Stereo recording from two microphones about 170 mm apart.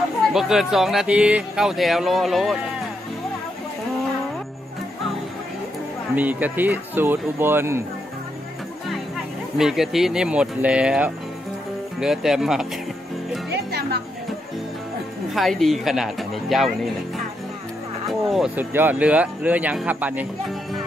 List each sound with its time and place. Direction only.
0.3 s speech: centre (ahead or behind)
6.1 s speech: 10° right (ahead or behind)
9.6 s speech: 5° right (ahead or behind)
13.5 s music: 75° right (ahead or behind)
15.3 s speech: centre (ahead or behind)
18.0 s speech: centre (ahead or behind)